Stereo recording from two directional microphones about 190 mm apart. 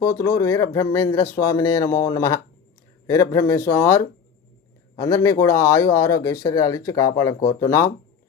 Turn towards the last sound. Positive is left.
turn(degrees=15)  # may be behind; listen again after turning